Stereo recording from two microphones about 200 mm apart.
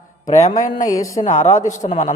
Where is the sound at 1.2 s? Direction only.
35° left (ahead or behind).